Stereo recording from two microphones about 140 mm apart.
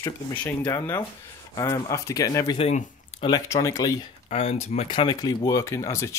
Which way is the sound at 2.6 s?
50° left (ahead or behind).